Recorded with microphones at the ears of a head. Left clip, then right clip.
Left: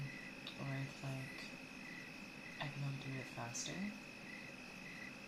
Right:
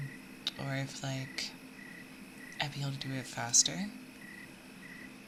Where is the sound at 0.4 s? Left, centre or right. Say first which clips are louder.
Right 13 dB; right.